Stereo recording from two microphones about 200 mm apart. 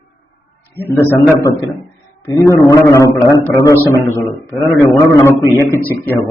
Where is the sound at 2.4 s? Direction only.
15° left (ahead or behind).